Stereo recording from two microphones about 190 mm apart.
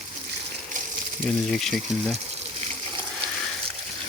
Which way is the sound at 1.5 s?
Centre (ahead or behind).